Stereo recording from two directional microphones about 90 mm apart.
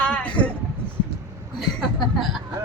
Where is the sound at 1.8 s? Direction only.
Centre (ahead or behind).